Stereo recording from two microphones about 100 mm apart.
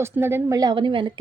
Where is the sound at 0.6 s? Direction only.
50° right (ahead or behind).